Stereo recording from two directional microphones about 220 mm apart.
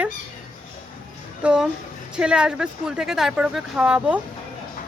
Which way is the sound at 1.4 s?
5° right (ahead or behind).